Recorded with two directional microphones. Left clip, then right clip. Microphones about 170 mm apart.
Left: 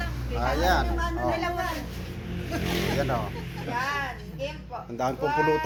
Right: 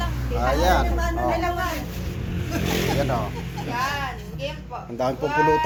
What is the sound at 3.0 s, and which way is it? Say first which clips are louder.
Speech: right 3 dB; 5° left (ahead or behind).